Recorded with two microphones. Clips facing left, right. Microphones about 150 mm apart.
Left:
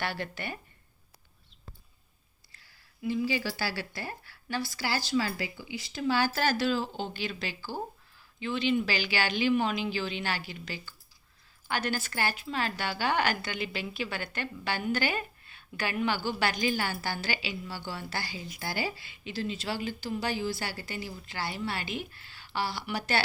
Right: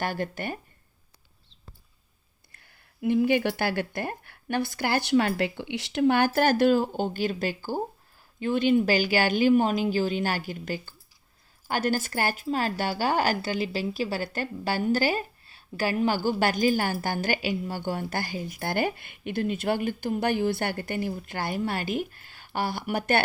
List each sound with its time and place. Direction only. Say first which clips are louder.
0.0 s a woman's voice: right 5 dB; 45° right (ahead or behind)
2.6 s a woman's voice: right 6 dB; 55° right (ahead or behind)